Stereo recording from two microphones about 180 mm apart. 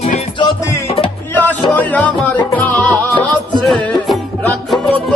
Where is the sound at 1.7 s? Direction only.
10° left (ahead or behind).